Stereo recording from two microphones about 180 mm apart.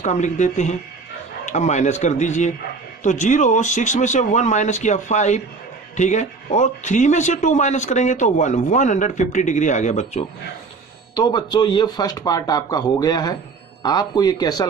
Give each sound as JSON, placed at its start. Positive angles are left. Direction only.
{"t": 0.0, "sound": "a man's voice", "side_deg": 40}
{"t": 11.1, "sound": "speech", "side_deg": 25}